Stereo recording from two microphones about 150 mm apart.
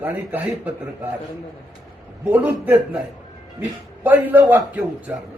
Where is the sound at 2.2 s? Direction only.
10° right (ahead or behind).